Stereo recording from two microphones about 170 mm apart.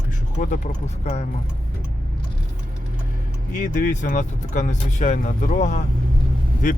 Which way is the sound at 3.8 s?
50° left (ahead or behind).